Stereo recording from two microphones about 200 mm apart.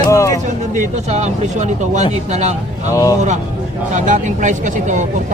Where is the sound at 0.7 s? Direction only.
35° right (ahead or behind).